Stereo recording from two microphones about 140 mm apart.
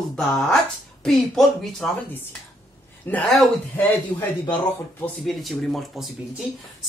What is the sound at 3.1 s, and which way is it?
A man's voice, 5° left (ahead or behind).